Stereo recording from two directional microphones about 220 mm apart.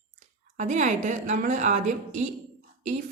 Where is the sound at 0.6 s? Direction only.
35° right (ahead or behind).